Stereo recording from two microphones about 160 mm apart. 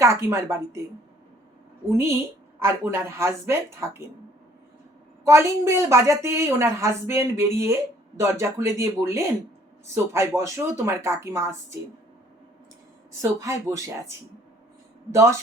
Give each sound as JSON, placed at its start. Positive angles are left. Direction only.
{"t": 0.0, "sound": "a woman's voice", "side_deg": -15}
{"t": 1.9, "sound": "a woman's voice", "side_deg": -15}
{"t": 5.2, "sound": "a woman's voice", "side_deg": -20}
{"t": 13.4, "sound": "speech", "side_deg": -20}